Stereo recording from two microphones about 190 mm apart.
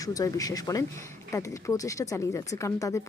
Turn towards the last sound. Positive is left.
turn(degrees=15)  # may be behind; listen again after turning